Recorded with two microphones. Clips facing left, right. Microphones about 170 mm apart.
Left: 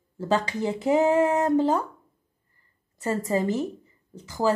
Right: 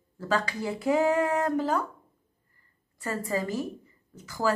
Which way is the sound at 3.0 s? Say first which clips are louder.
Left 5 dB; 20° left (ahead or behind).